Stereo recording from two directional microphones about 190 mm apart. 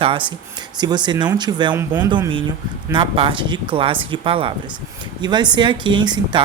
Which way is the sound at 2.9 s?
25° right (ahead or behind).